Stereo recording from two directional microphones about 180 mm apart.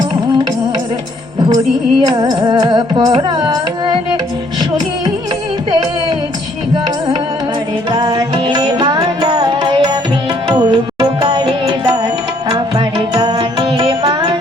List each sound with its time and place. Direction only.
1.5 s music: 20° right (ahead or behind)
7.9 s music: 25° right (ahead or behind)